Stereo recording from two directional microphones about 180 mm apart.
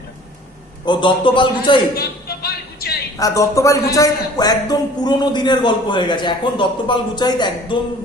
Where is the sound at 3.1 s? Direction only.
20° left (ahead or behind).